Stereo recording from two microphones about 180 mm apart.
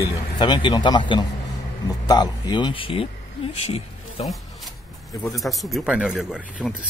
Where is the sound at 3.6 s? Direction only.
35° left (ahead or behind).